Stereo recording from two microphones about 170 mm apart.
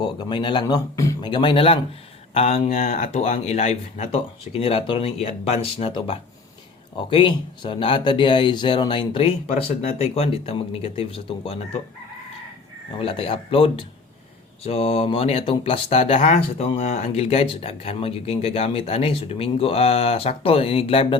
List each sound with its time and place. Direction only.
0.0 s speech: 25° left (ahead or behind)
13.0 s speech: 30° left (ahead or behind)